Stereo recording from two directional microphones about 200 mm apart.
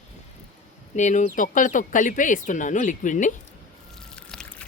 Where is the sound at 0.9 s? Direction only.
35° left (ahead or behind).